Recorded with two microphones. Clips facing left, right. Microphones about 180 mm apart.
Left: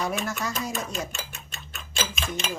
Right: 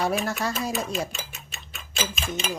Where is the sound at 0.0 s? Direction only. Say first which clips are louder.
Right 3 dB; 35° right (ahead or behind).